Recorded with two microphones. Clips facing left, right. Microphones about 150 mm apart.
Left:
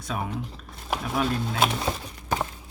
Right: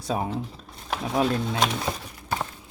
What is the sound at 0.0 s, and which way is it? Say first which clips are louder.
Speech: right 4 dB; 30° right (ahead or behind).